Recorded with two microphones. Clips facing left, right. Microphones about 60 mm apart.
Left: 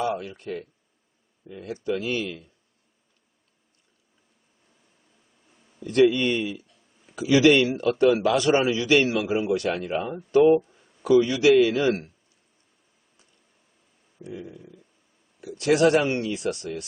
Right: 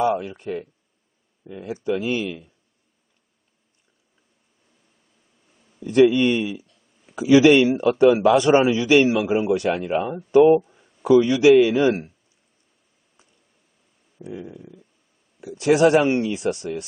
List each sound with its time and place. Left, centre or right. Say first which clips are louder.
0.0 s speech: right 6 dB; centre
5.8 s a man's voice: right 4 dB; centre
14.2 s a man's voice: right 3 dB; centre